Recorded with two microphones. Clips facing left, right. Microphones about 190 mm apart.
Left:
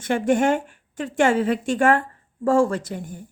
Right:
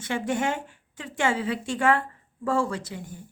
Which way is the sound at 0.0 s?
50° left (ahead or behind).